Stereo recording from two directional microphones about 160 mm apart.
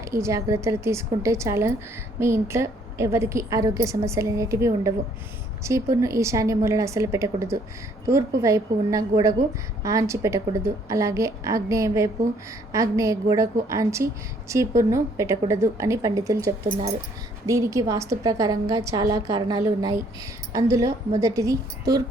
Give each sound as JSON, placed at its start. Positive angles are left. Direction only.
{"t": 0.0, "sound": "a woman's voice", "side_deg": -20}